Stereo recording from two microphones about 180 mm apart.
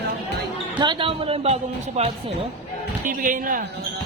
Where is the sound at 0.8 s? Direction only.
25° right (ahead or behind).